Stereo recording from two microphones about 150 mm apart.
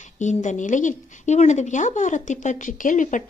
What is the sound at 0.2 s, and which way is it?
Speech, 55° left (ahead or behind).